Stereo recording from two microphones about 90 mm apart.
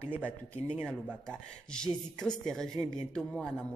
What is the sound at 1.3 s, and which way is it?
Speech, 10° left (ahead or behind).